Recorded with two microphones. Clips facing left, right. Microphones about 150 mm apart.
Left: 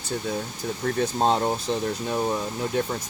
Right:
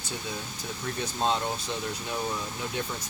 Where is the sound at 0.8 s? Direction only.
50° left (ahead or behind).